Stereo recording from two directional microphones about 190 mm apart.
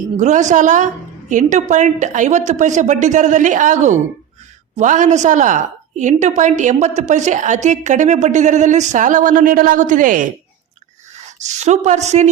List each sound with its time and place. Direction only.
0.2 s a woman's voice: 40° right (ahead or behind)